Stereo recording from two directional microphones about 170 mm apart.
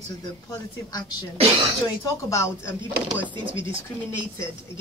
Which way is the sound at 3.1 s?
10° right (ahead or behind).